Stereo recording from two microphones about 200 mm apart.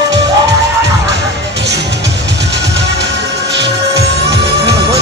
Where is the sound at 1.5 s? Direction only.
60° right (ahead or behind).